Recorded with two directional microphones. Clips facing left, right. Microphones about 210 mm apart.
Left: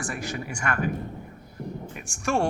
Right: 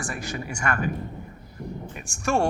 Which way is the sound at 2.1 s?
40° right (ahead or behind).